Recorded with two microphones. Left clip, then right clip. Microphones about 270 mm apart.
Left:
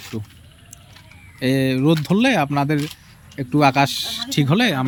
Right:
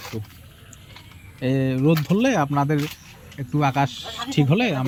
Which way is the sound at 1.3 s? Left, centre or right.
Centre.